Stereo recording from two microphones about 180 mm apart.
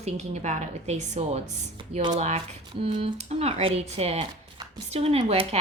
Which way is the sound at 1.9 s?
25° right (ahead or behind).